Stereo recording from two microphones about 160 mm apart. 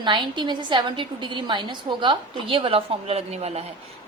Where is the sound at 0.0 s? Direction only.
30° right (ahead or behind).